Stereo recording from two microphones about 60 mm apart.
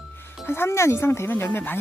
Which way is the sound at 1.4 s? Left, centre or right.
Left.